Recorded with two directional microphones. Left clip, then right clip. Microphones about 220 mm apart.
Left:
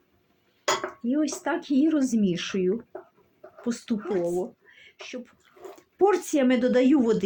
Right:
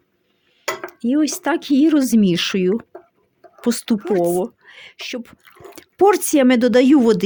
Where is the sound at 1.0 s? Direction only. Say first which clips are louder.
Right 11 dB; 55° right (ahead or behind).